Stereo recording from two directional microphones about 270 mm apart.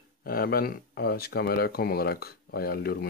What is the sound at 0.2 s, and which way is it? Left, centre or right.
Speech, left.